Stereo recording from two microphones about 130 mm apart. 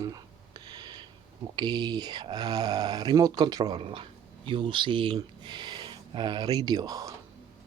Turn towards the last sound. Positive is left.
turn(degrees=-30)  # may be behind; listen again after turning